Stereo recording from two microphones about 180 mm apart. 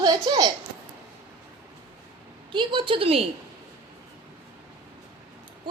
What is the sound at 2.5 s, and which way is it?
Speech, 25° right (ahead or behind).